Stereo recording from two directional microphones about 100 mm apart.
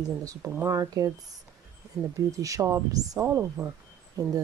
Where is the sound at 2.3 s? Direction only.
35° right (ahead or behind).